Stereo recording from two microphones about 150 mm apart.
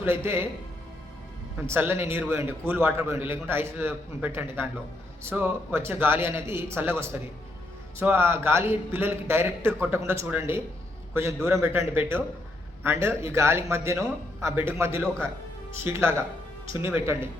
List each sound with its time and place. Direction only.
0.0 s a man's voice: 15° right (ahead or behind)
1.6 s a man's voice: 15° right (ahead or behind)